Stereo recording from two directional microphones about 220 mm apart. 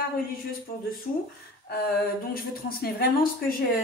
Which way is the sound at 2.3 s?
45° left (ahead or behind).